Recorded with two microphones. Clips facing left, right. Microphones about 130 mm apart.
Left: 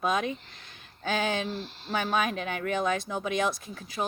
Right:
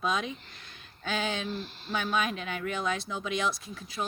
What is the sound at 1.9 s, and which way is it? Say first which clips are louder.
Speech: left 2 dB; 50° left (ahead or behind).